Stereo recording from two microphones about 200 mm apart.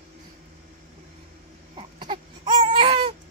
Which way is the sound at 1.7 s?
25° right (ahead or behind).